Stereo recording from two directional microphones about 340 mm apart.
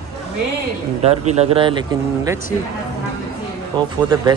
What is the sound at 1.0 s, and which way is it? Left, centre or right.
Speech, centre.